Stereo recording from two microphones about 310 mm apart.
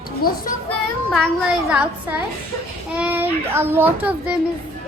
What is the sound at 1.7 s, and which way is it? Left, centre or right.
A child's voice, centre.